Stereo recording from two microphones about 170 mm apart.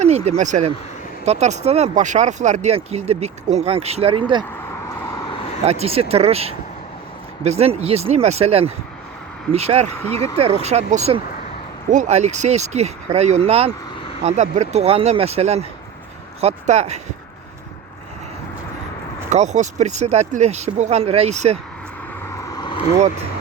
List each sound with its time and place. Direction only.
0.0 s speech: 40° right (ahead or behind)
5.2 s vehicle: 30° left (ahead or behind)
5.6 s speech: 35° right (ahead or behind)
10.0 s speech: 15° left (ahead or behind)
10.4 s speech: 40° right (ahead or behind)
19.3 s speech: 45° right (ahead or behind)
22.5 s vehicle: 25° left (ahead or behind)